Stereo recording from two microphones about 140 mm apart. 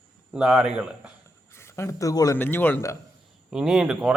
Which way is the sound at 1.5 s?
20° left (ahead or behind).